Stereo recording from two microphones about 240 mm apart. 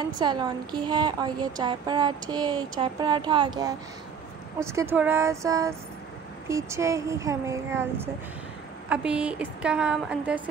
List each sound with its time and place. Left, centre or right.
0.2 s a woman's voice: centre